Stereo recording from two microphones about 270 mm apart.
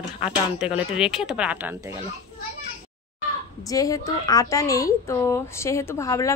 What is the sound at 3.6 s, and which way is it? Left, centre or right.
A woman's voice, centre.